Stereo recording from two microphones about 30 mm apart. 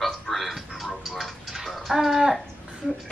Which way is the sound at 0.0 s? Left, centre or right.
Centre.